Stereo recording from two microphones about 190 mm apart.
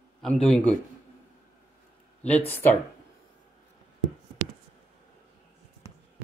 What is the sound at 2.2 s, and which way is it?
Speech, 10° left (ahead or behind).